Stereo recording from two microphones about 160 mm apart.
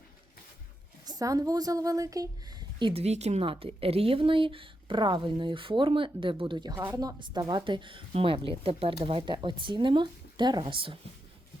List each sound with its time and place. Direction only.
1.0 s a woman's voice: 25° right (ahead or behind)
2.9 s speech: 40° right (ahead or behind)